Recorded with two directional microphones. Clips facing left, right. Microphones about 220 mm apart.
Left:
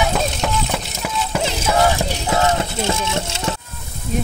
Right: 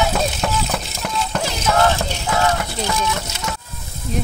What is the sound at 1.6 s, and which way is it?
Clip-clop, 10° left (ahead or behind).